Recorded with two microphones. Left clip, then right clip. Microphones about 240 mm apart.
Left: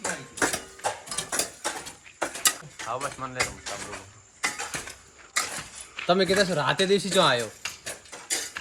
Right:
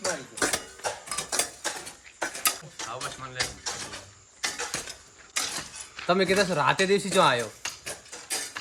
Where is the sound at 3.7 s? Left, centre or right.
Centre.